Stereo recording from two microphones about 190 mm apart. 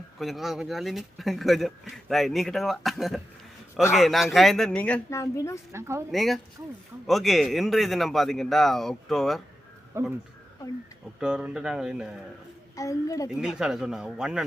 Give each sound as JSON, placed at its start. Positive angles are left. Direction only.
{"t": 0.2, "sound": "speech", "side_deg": 0}
{"t": 5.7, "sound": "speech", "side_deg": -15}
{"t": 6.1, "sound": "speech", "side_deg": 0}
{"t": 10.0, "sound": "speech", "side_deg": -15}
{"t": 11.2, "sound": "speech", "side_deg": -5}
{"t": 12.7, "sound": "a woman's voice", "side_deg": 15}
{"t": 13.4, "sound": "speech", "side_deg": -5}